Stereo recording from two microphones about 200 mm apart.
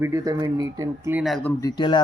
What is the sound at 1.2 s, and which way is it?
Speech, centre (ahead or behind).